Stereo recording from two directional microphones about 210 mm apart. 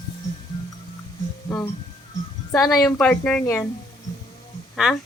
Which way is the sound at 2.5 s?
Centre (ahead or behind).